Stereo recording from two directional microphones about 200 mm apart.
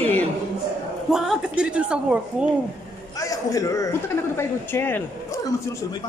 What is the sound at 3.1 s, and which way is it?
Speech, 15° left (ahead or behind).